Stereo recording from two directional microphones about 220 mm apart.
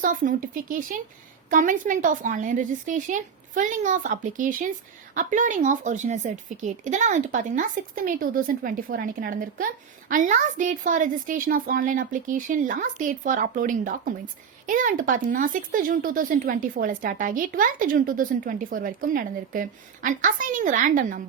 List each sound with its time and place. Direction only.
0.0 s speech: 35° right (ahead or behind)